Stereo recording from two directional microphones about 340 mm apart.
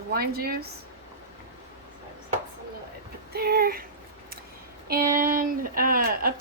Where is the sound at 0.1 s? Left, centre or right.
Right.